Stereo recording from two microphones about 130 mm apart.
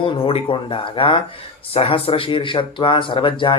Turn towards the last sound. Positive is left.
turn(degrees=40)  # may be behind; listen again after turning